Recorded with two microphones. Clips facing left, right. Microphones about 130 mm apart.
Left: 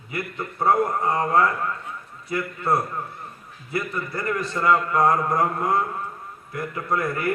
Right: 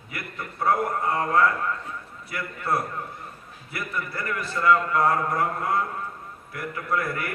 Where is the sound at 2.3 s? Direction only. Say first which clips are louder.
Left 4 dB; 25° left (ahead or behind).